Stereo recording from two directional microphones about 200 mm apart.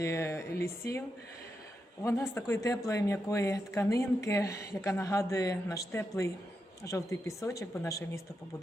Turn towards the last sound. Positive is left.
turn(degrees=15)  # may be behind; listen again after turning